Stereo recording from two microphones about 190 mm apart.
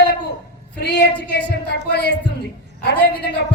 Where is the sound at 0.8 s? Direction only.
60° left (ahead or behind).